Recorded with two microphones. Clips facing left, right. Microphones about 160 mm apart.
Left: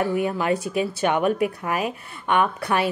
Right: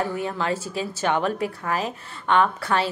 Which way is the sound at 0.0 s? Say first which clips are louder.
Left 3 dB; 15° left (ahead or behind).